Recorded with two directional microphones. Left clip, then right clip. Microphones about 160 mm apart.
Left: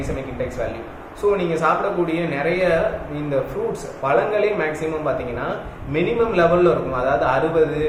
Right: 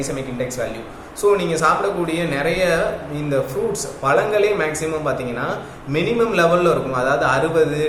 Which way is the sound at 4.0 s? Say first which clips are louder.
Right 2 dB; 10° right (ahead or behind).